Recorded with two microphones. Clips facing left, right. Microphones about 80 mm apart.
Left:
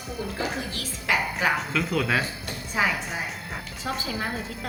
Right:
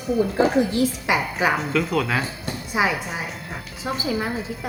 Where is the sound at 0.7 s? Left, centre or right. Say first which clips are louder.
Right 6 dB; centre.